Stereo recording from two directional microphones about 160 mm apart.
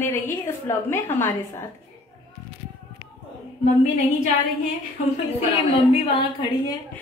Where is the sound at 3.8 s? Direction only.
45° left (ahead or behind).